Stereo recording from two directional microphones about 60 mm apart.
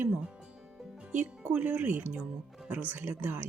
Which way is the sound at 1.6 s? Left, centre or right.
Right.